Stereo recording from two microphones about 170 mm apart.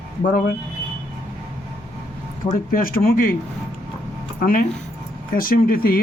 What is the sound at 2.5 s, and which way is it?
Speech, 55° left (ahead or behind).